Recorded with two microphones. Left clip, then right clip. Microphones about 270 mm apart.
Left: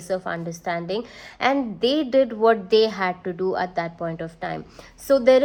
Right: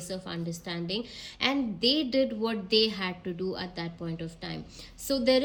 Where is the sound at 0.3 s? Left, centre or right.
Centre.